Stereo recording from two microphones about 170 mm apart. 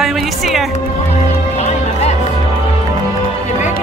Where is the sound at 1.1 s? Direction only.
40° left (ahead or behind).